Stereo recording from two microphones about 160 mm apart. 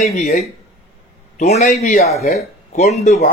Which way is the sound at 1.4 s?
45° left (ahead or behind).